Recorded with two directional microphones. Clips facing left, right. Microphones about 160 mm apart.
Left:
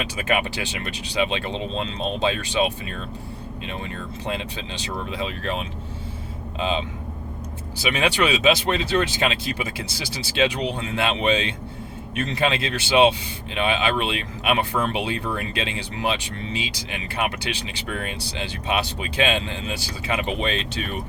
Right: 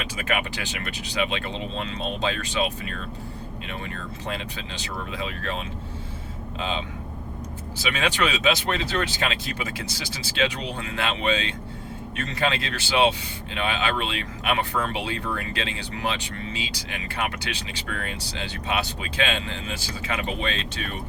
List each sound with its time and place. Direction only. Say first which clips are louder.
0.2 s speech: left 4 dB; 25° left (ahead or behind)
5.1 s speech: left 3 dB; 20° left (ahead or behind)
7.8 s speech: left 3 dB; 15° left (ahead or behind)